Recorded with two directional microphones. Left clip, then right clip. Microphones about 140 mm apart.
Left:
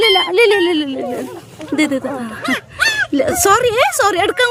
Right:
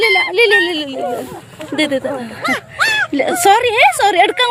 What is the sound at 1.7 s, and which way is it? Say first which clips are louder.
A woman's voice: right 1 dB; 35° left (ahead or behind).